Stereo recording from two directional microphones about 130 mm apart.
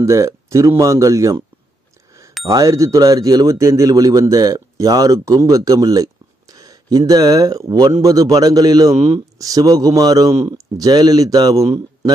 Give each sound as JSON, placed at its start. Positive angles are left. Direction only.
{"t": 0.0, "sound": "speech", "side_deg": -25}
{"t": 2.4, "sound": "speech", "side_deg": -25}